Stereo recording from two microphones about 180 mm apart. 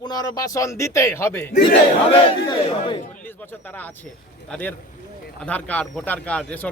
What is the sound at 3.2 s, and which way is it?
A man's voice, 10° left (ahead or behind).